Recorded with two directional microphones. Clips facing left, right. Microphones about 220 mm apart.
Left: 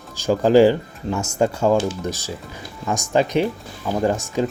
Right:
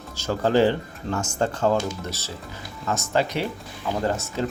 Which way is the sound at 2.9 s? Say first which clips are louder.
Left 4 dB; 15° left (ahead or behind).